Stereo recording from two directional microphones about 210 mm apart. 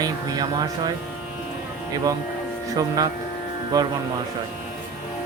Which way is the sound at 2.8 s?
15° right (ahead or behind).